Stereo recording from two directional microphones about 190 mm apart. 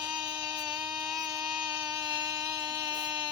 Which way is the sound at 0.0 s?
20° right (ahead or behind).